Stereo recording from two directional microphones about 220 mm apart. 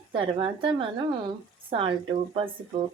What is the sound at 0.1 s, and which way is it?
Speech, 25° right (ahead or behind).